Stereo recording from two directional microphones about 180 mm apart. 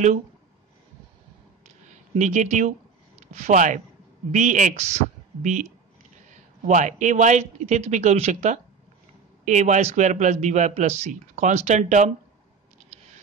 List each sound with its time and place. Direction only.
2.1 s speech: 40° right (ahead or behind)
6.7 s speech: 45° right (ahead or behind)